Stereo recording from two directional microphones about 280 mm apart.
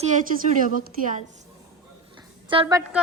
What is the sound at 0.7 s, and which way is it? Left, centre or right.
A woman's voice, right.